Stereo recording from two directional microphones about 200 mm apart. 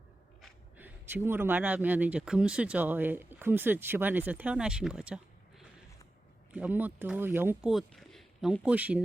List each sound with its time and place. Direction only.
0.8 s speech: 10° right (ahead or behind)